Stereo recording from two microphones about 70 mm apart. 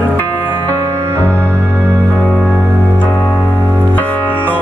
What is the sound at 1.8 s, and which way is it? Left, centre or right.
Music, centre.